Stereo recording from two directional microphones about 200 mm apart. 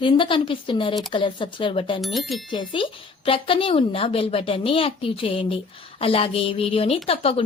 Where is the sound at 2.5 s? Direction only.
25° left (ahead or behind).